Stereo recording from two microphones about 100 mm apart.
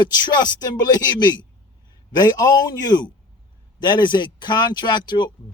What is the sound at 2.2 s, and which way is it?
A man's voice, 40° left (ahead or behind).